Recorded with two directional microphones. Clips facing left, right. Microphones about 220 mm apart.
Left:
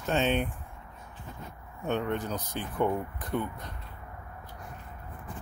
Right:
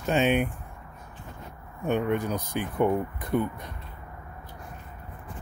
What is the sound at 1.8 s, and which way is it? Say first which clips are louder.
Speech: right 4 dB; 10° right (ahead or behind).